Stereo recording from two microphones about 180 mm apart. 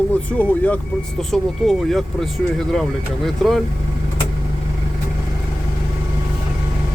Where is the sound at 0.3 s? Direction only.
10° left (ahead or behind).